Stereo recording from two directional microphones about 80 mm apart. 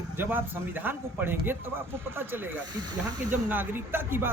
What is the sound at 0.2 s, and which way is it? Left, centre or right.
Speech, right.